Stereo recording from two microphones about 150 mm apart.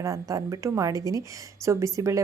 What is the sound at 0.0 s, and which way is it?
A woman's voice, 20° right (ahead or behind).